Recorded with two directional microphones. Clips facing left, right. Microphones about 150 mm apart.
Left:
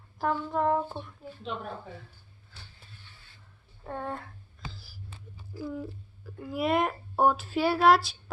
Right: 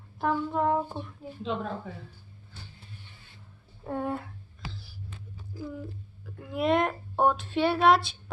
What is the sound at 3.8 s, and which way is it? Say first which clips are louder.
Speech: right 4 dB; 10° right (ahead or behind).